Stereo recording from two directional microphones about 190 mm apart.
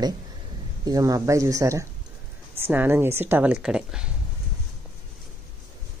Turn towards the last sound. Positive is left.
turn(degrees=-5)  # may be behind; listen again after turning